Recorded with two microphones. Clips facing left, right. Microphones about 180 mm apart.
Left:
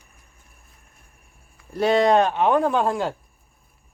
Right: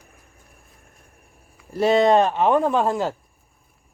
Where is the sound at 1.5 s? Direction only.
Centre (ahead or behind).